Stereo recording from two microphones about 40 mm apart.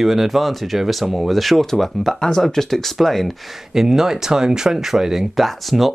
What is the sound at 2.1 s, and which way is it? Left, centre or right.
Speech, centre.